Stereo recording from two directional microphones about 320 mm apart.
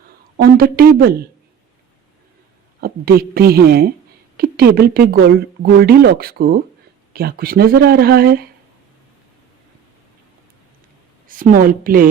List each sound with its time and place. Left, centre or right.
0.3 s speech: right
2.8 s speech: right
11.3 s speech: right